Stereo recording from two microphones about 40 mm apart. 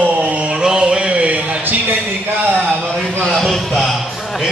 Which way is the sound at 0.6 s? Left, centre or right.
Right.